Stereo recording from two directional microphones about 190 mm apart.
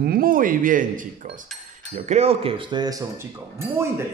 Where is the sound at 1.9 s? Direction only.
35° right (ahead or behind).